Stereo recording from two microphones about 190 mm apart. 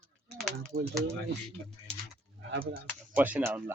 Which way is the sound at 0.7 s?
50° right (ahead or behind).